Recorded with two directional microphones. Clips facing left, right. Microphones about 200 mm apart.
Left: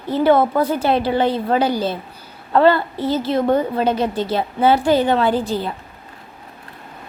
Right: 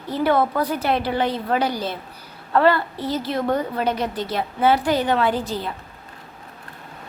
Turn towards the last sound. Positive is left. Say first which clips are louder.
# left 4 dB
turn(degrees=30)  # may be behind; listen again after turning